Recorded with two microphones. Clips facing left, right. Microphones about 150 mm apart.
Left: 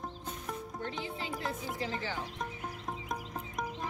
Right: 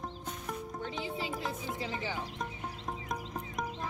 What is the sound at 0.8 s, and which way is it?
Speech, 15° right (ahead or behind).